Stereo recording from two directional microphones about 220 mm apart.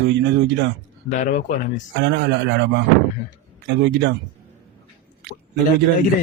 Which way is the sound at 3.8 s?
50° right (ahead or behind).